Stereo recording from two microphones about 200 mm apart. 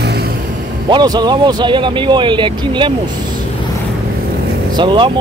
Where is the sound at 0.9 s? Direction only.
20° right (ahead or behind).